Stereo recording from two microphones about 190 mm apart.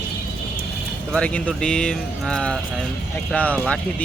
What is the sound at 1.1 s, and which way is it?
Speech, 5° left (ahead or behind).